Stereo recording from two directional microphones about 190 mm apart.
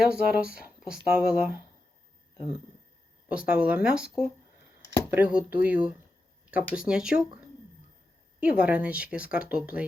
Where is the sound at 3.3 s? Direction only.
5° right (ahead or behind).